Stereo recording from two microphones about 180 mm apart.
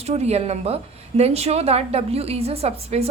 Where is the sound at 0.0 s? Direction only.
35° right (ahead or behind).